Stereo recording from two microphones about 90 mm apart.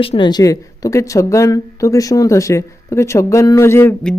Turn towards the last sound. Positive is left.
turn(degrees=30)  # may be behind; listen again after turning